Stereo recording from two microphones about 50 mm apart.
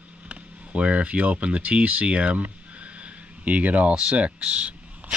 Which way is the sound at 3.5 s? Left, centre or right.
Right.